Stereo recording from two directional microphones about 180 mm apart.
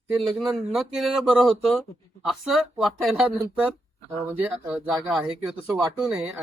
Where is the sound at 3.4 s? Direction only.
10° right (ahead or behind).